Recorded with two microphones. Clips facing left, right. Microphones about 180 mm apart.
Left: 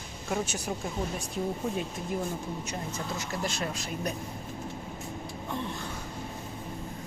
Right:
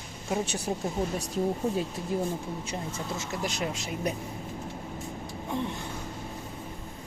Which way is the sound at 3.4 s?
15° right (ahead or behind).